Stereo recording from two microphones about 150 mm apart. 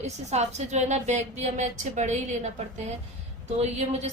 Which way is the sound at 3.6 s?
50° right (ahead or behind).